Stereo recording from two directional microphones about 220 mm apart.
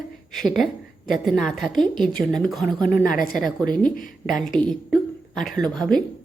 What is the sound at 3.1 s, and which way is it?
Speech, 40° left (ahead or behind).